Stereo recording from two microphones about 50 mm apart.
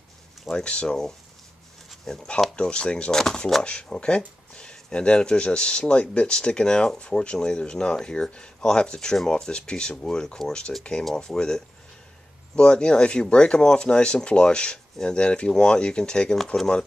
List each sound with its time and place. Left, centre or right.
0.7 s speech: left
2.1 s speech: centre
3.6 s speech: left